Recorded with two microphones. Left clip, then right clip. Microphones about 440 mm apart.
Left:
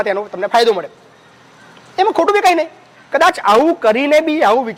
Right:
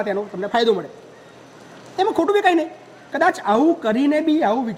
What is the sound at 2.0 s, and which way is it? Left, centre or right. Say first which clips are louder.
Speech: left 5 dB; left.